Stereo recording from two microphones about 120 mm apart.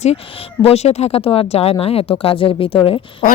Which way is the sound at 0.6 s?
60° left (ahead or behind).